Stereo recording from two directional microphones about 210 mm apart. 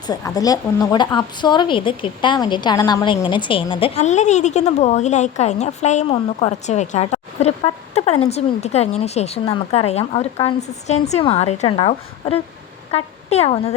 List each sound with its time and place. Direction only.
0.1 s a woman's voice: 15° left (ahead or behind)